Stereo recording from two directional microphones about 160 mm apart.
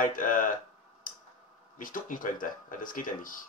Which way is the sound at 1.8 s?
55° left (ahead or behind).